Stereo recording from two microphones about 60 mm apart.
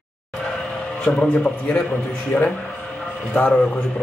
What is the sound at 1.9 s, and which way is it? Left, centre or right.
A man's voice, left.